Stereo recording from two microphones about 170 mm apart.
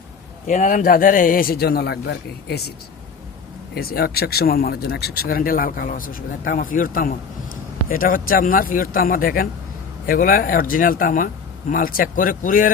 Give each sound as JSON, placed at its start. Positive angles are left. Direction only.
{"t": 0.4, "sound": "speech", "side_deg": 50}
{"t": 3.8, "sound": "speech", "side_deg": 65}